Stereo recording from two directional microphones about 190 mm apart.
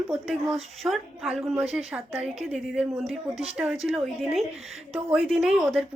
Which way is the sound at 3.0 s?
30° right (ahead or behind).